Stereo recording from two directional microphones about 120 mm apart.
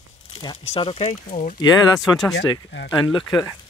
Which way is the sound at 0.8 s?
55° left (ahead or behind).